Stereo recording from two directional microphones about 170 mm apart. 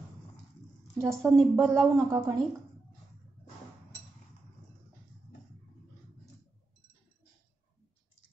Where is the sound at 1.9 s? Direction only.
20° right (ahead or behind).